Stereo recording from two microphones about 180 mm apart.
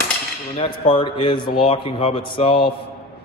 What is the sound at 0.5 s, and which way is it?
A man's voice, 30° left (ahead or behind).